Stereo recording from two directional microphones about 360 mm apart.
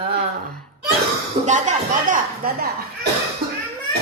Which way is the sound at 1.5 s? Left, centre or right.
Centre.